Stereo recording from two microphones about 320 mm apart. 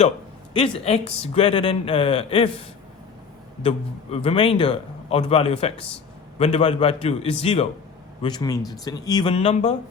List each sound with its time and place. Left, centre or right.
0.5 s speech: centre
3.6 s a man's voice: centre